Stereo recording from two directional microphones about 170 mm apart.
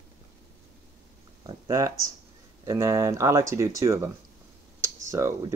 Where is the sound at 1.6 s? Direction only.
20° right (ahead or behind).